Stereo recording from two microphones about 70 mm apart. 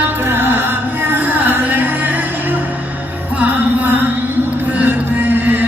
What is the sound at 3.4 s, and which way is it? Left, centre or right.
Music, right.